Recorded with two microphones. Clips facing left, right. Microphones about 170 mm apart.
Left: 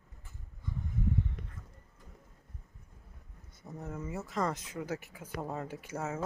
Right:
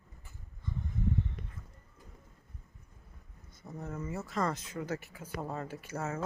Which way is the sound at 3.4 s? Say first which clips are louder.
Right 1 dB; 15° left (ahead or behind).